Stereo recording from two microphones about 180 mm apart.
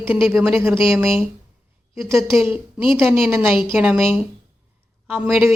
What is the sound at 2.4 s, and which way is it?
Speech, 10° right (ahead or behind).